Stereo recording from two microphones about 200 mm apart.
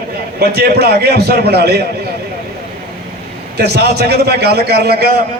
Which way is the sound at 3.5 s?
55° right (ahead or behind).